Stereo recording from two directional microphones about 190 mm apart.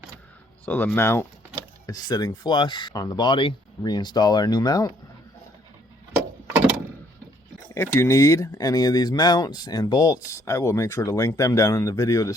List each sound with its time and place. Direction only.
0.6 s speech: 10° left (ahead or behind)
7.7 s speech: 15° left (ahead or behind)